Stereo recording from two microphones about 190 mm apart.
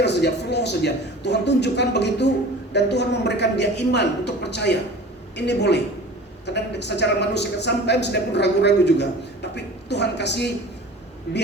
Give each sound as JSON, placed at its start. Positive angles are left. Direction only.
{"t": 0.0, "sound": "a man's voice", "side_deg": 65}